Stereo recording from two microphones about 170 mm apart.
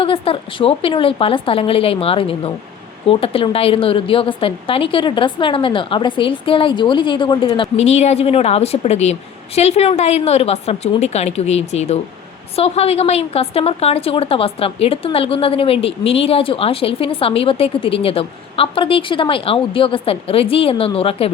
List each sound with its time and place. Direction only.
0.0 s a woman's voice: 35° left (ahead or behind)